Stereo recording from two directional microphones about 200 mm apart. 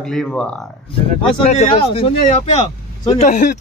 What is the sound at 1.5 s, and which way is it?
Speech, 30° left (ahead or behind).